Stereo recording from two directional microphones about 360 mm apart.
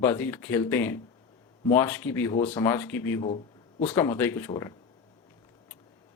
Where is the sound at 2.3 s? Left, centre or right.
Centre.